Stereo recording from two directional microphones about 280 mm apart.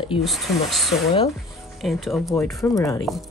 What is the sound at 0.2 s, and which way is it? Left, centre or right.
Speech, centre.